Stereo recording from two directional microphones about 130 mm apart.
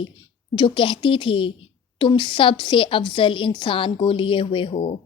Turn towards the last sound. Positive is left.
turn(degrees=50)  # may be behind; listen again after turning